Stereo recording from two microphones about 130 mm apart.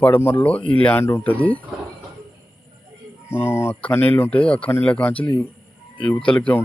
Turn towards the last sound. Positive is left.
turn(degrees=10)  # may be behind; listen again after turning